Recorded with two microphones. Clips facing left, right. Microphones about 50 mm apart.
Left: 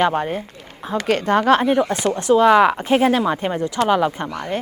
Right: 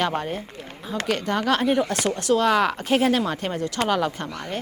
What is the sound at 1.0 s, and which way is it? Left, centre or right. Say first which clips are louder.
Speech: left 7 dB; left.